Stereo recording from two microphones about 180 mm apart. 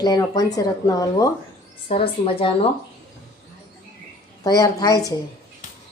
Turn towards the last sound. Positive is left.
turn(degrees=20)  # may be behind; listen again after turning